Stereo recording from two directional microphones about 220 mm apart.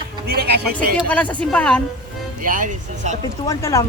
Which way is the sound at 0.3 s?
45° right (ahead or behind).